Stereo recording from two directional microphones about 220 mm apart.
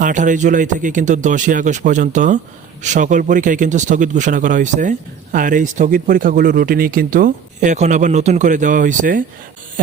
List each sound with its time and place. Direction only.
0.0 s speech: 35° right (ahead or behind)